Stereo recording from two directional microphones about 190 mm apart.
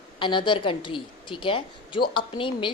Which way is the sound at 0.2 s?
25° left (ahead or behind).